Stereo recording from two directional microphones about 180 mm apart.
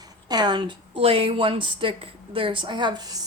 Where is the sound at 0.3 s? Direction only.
25° right (ahead or behind).